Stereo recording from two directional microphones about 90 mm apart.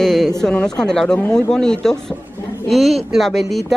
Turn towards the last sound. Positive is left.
turn(degrees=0)  # may be behind; listen again after turning